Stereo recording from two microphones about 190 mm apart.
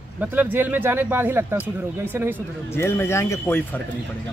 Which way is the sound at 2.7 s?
15° left (ahead or behind).